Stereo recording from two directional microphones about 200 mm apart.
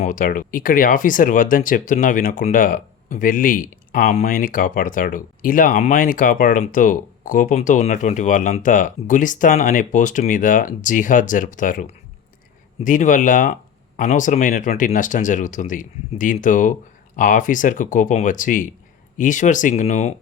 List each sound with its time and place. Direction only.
0.0 s speech: 40° left (ahead or behind)